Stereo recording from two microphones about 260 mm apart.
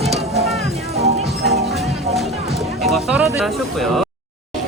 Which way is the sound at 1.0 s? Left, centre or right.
Right.